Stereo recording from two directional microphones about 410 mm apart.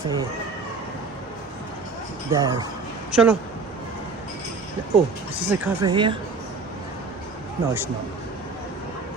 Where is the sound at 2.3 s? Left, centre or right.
Centre.